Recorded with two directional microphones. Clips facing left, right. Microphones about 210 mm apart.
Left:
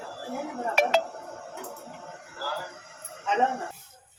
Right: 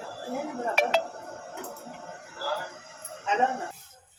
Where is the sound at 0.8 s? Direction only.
45° left (ahead or behind).